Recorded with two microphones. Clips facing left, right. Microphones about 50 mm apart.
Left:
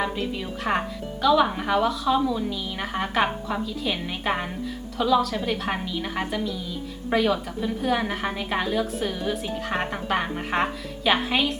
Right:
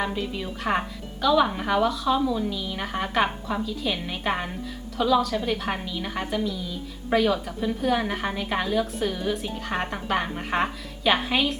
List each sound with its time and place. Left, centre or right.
0.0 s a woman's voice: centre